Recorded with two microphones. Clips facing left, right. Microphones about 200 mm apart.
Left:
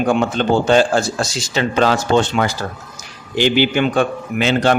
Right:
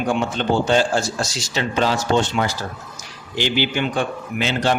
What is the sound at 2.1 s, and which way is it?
Speech, 75° left (ahead or behind).